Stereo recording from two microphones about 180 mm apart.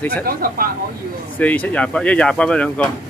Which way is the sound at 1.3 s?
10° left (ahead or behind).